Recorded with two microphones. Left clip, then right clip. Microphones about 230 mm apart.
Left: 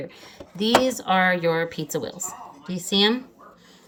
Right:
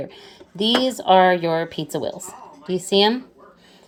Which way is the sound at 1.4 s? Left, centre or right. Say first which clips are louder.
Right 1 dB; right.